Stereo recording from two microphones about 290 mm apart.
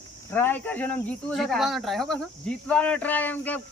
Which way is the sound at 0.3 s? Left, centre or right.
Centre.